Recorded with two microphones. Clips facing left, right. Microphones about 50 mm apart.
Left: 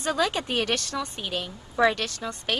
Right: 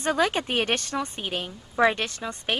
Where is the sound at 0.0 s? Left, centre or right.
Right.